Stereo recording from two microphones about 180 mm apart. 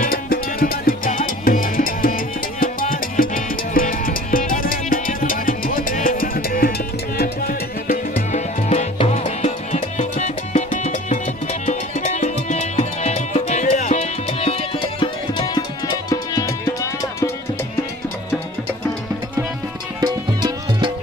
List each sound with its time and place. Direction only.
0.0 s music: 55° left (ahead or behind); by 16.7 s 20° left (ahead or behind)
20.0 s music: 25° right (ahead or behind)